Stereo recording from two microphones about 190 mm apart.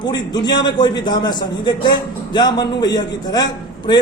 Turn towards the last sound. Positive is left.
turn(degrees=20)  # may be behind; listen again after turning